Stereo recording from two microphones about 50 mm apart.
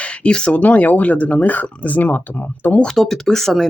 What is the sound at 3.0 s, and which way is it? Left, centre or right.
Speech, centre.